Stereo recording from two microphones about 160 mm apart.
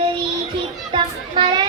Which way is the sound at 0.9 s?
30° right (ahead or behind).